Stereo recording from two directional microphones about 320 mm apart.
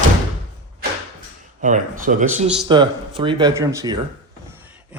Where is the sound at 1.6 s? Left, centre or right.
Right.